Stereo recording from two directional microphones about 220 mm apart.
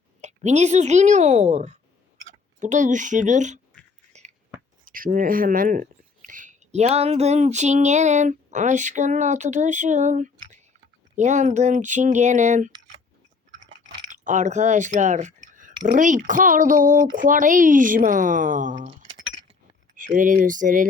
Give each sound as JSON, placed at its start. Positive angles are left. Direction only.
{"t": 0.2, "sound": "a woman's voice", "side_deg": -30}
{"t": 4.1, "sound": "a sound", "side_deg": -30}
{"t": 4.9, "sound": "speech", "side_deg": -40}
{"t": 14.1, "sound": "speech", "side_deg": -35}